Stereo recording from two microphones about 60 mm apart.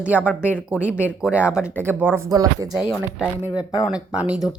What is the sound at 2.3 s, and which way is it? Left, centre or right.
Speech, right.